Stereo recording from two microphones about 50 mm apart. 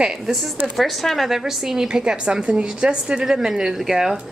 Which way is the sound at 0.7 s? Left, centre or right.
Centre.